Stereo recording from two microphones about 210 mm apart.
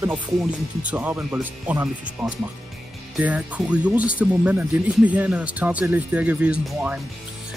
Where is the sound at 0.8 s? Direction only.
5° right (ahead or behind).